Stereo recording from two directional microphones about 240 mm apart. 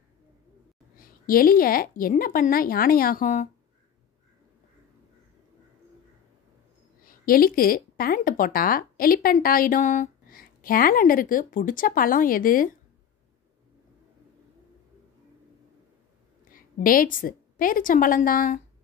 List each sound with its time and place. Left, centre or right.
0.9 s speech: left
7.1 s speech: left
16.4 s a woman's voice: left